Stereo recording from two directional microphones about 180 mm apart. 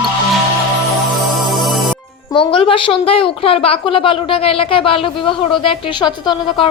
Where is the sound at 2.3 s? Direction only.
30° left (ahead or behind).